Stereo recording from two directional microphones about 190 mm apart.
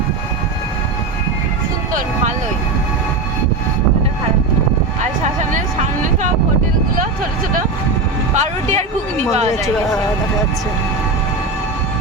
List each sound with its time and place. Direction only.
8.4 s music: 35° right (ahead or behind)